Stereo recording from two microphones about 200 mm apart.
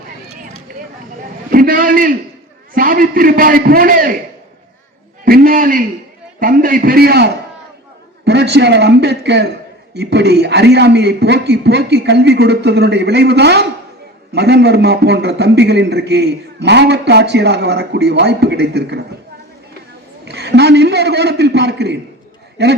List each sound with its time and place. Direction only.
1.2 s a man's voice: 45° right (ahead or behind)
5.2 s a man's voice: 45° right (ahead or behind)
20.2 s a man's voice: 55° right (ahead or behind)